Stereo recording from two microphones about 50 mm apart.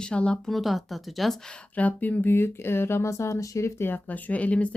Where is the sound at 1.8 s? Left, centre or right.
Left.